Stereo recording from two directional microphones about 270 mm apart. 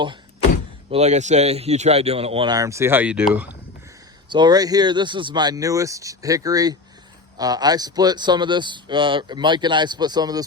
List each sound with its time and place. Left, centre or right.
0.9 s speech: right